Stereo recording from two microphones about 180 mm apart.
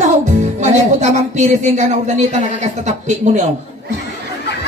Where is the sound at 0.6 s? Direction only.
40° right (ahead or behind).